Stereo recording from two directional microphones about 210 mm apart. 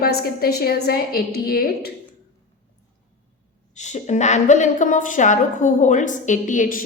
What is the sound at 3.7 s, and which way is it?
A woman's voice, 35° left (ahead or behind).